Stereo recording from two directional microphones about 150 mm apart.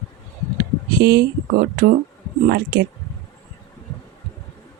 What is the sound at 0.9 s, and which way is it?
Speech, 90° right.